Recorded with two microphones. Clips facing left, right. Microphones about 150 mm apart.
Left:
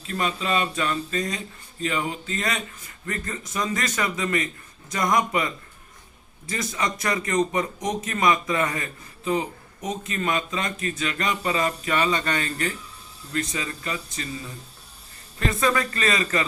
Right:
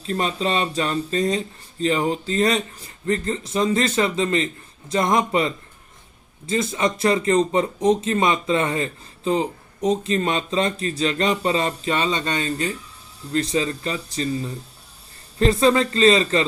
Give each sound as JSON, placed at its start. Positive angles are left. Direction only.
{"t": 0.1, "sound": "speech", "side_deg": -30}
{"t": 13.3, "sound": "speech", "side_deg": -30}
{"t": 15.4, "sound": "speech", "side_deg": -30}